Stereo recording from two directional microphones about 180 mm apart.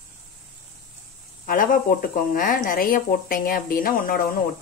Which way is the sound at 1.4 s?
50° left (ahead or behind).